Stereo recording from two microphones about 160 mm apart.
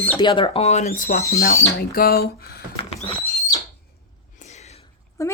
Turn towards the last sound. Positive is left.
turn(degrees=15)  # may be behind; listen again after turning